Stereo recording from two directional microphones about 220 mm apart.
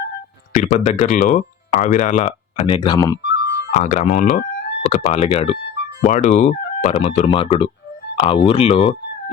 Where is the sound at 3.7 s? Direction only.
30° left (ahead or behind).